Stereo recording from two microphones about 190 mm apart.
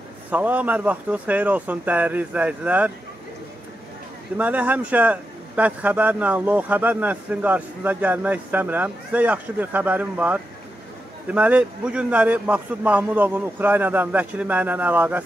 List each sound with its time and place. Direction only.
0.3 s a man's voice: 10° right (ahead or behind)
4.4 s a man's voice: 10° right (ahead or behind)